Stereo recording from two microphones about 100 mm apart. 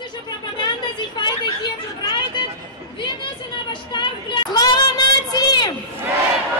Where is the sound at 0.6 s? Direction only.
50° left (ahead or behind).